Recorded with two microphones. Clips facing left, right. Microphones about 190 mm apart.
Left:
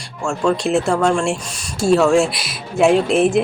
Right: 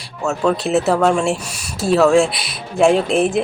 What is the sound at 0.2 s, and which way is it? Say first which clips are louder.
Speech: even; 5° right (ahead or behind).